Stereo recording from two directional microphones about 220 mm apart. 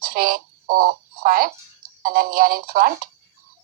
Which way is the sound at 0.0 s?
40° right (ahead or behind).